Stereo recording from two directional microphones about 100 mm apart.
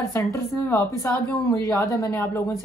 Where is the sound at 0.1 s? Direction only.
30° left (ahead or behind).